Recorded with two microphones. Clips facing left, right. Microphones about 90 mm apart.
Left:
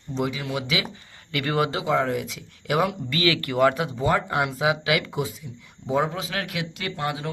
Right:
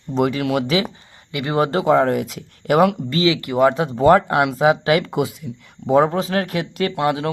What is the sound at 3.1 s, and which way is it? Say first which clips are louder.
Speech: right 5 dB; 20° right (ahead or behind).